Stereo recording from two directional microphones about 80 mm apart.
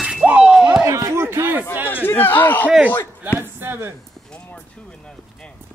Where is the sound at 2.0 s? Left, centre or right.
Left.